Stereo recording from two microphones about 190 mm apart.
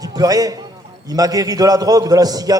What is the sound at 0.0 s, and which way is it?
A man's voice, 20° right (ahead or behind).